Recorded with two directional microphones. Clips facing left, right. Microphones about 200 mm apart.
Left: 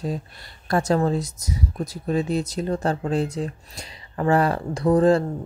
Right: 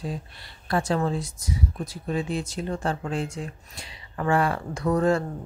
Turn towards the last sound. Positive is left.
turn(degrees=35)  # may be behind; listen again after turning